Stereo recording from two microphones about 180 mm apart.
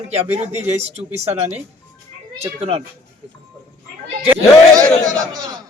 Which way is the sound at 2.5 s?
35° right (ahead or behind).